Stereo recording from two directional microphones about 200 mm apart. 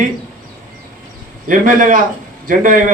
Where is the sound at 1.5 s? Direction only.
40° right (ahead or behind).